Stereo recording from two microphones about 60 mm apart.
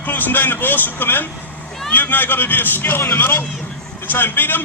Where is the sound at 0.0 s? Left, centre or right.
Left.